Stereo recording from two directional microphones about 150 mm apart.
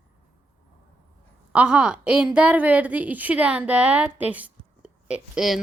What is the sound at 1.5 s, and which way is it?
A woman's voice, 5° right (ahead or behind).